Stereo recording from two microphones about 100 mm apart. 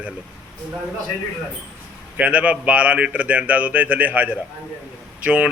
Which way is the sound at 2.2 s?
15° right (ahead or behind).